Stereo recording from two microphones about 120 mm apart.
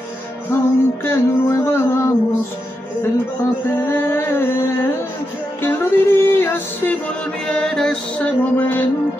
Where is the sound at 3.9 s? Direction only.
20° left (ahead or behind).